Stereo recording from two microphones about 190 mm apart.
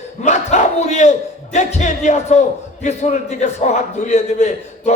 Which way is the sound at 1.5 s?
40° left (ahead or behind).